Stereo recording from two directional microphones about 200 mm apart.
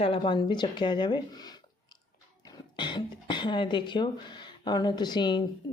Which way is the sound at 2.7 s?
25° left (ahead or behind).